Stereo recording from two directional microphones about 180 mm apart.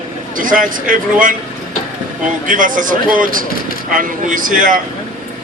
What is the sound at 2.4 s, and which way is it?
Speech, 45° right (ahead or behind).